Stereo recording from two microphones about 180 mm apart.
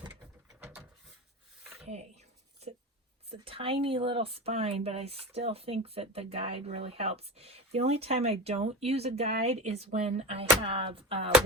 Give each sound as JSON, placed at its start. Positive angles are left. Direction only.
{"t": 3.2, "sound": "speech", "side_deg": -30}